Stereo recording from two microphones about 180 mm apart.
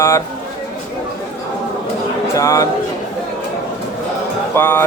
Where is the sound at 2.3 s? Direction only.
15° left (ahead or behind).